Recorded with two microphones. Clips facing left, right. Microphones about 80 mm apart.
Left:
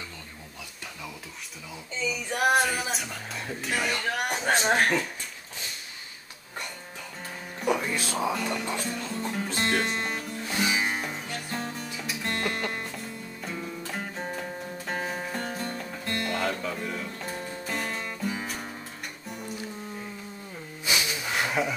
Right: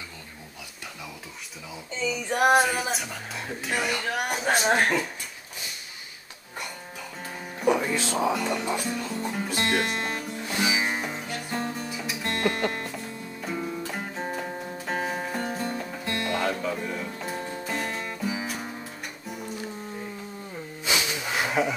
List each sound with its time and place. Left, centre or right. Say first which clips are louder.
2.6 s speech: right 2 dB; centre
4.7 s speech: right 1 dB; centre
7.6 s music: right 3 dB; right
8.6 s music: right 3 dB; centre
10.4 s music: right 1 dB; centre
20.8 s hiss: right 1 dB; right
21.3 s a sound: right 2 dB; centre